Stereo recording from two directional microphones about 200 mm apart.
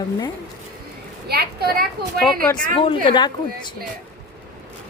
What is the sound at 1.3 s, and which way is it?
Speech, 50° right (ahead or behind).